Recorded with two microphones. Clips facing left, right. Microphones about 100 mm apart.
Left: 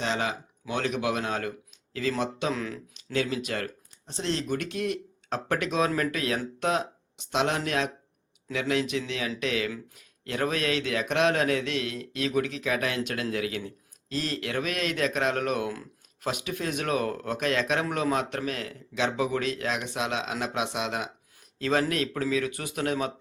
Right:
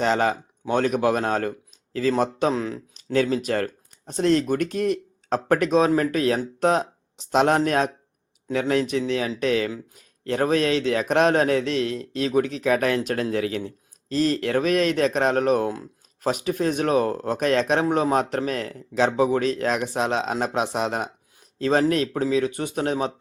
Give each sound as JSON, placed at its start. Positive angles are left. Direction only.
{"t": 0.0, "sound": "speech", "side_deg": -45}
{"t": 15.7, "sound": "a sound", "side_deg": -25}
{"t": 16.3, "sound": "speech", "side_deg": -40}